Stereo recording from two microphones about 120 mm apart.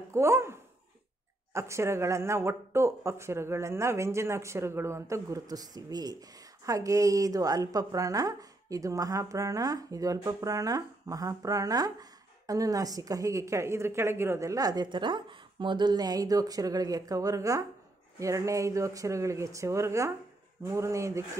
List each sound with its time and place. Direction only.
0.1 s a woman's voice: 25° right (ahead or behind)